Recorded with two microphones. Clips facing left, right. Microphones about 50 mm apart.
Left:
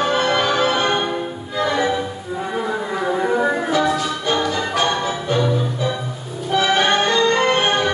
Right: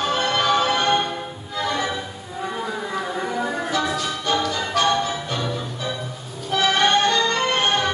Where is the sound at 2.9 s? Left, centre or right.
Centre.